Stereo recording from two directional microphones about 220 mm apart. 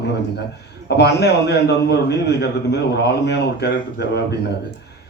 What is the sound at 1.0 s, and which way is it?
A man's voice, 50° left (ahead or behind).